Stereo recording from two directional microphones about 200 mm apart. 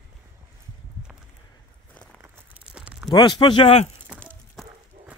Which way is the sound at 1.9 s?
5° left (ahead or behind).